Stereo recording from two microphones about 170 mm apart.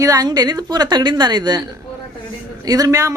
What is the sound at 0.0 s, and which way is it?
A woman's voice, 20° right (ahead or behind).